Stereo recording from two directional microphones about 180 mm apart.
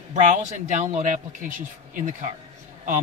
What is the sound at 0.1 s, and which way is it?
Speech, 40° right (ahead or behind).